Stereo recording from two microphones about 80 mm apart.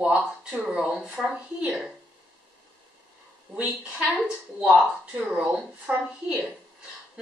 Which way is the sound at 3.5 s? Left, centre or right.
Centre.